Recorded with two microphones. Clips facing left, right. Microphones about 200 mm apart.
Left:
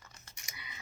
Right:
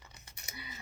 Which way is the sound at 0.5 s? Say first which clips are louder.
Right 6 dB; 30° right (ahead or behind).